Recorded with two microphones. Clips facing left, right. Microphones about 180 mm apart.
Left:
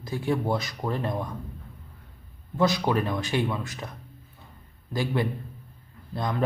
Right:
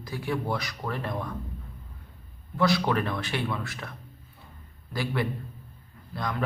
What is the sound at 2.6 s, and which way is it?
Speech, 20° left (ahead or behind).